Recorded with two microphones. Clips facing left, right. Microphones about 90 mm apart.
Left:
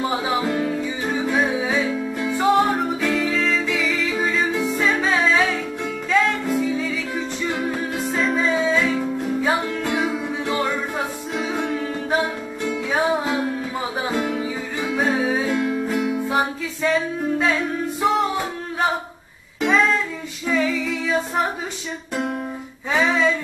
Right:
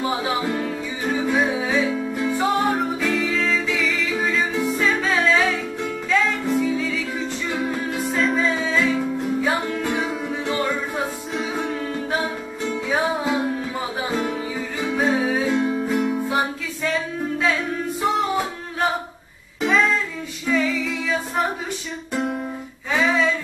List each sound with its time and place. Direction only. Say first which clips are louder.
0.2 s music: left 2 dB; centre (ahead or behind)
8.1 s music: even; centre (ahead or behind)
11.3 s music: left 2 dB; centre (ahead or behind)
14.9 s music: even; centre (ahead or behind)
15.5 s music: right 1 dB; 15° right (ahead or behind)
15.9 s music: even; centre (ahead or behind)
19.6 s music: left 1 dB; centre (ahead or behind)
22.9 s music: even; centre (ahead or behind)